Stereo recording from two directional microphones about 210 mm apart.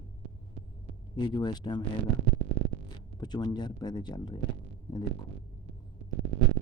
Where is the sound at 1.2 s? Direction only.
20° left (ahead or behind).